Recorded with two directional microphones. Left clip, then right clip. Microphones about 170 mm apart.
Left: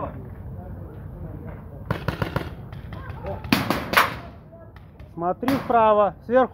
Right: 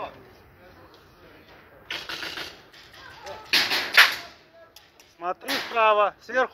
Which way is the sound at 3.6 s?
65° left (ahead or behind).